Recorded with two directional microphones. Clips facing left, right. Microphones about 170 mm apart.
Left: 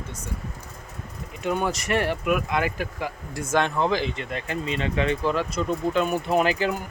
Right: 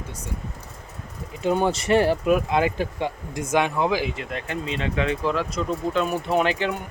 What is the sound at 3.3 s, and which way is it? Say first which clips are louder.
Speech: right 1 dB; 15° right (ahead or behind).